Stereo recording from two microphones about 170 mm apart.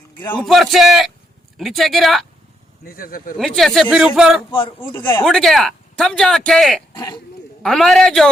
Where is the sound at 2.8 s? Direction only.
60° left (ahead or behind).